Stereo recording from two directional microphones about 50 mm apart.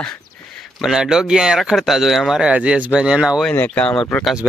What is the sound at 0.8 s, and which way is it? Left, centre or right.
Speech, centre.